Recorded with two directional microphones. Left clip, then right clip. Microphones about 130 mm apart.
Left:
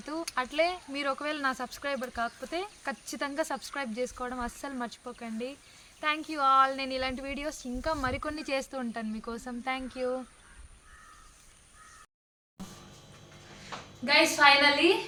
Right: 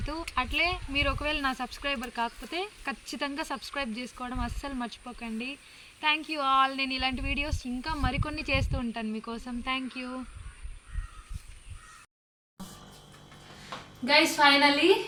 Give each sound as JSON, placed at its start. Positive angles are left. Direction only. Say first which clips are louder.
{"t": 0.0, "sound": "speech", "louder": "right 1 dB", "side_deg": 30}
{"t": 14.0, "sound": "a woman's voice", "louder": "right 1 dB", "side_deg": 25}